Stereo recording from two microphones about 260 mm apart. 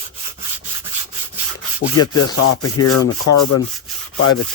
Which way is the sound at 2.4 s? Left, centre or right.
Left.